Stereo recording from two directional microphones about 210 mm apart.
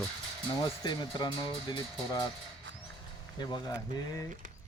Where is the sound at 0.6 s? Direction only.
20° left (ahead or behind).